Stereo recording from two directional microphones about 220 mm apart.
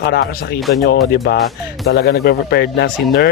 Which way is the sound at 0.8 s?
45° left (ahead or behind).